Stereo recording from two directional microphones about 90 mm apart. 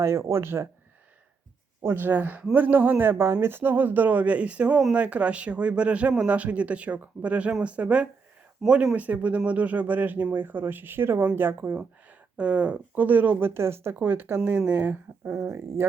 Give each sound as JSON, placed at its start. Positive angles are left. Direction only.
{"t": 0.0, "sound": "speech", "side_deg": -30}
{"t": 1.8, "sound": "speech", "side_deg": -25}
{"t": 12.4, "sound": "speech", "side_deg": -15}